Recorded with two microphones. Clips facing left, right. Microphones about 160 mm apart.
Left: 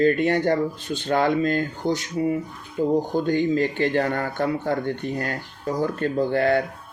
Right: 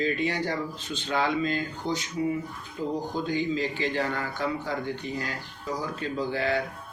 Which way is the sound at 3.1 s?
55° left (ahead or behind).